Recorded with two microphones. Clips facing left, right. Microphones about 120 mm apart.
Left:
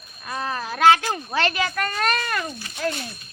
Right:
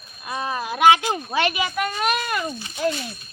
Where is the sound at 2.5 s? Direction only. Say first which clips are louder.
Right 3 dB; 25° right (ahead or behind).